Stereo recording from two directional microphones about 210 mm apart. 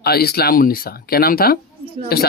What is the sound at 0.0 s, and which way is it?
Speech, 50° left (ahead or behind).